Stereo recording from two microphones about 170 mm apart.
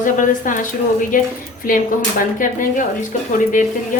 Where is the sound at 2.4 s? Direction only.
50° left (ahead or behind).